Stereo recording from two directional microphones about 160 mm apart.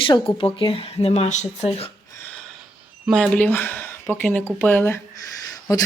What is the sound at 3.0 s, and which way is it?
Speech, 5° left (ahead or behind).